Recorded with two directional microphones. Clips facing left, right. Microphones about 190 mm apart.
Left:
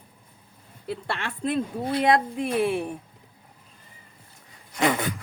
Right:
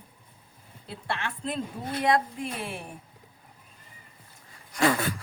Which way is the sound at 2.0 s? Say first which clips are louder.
Left 2 dB; 75° left (ahead or behind).